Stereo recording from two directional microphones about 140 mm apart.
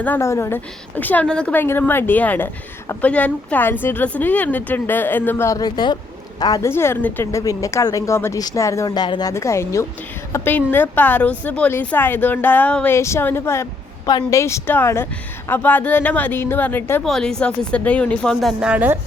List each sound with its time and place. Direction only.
0.0 s a woman's voice: 15° left (ahead or behind); by 9.3 s 30° left (ahead or behind)
9.3 s a woman's voice: 20° left (ahead or behind)
17.0 s a woman's voice: 5° left (ahead or behind)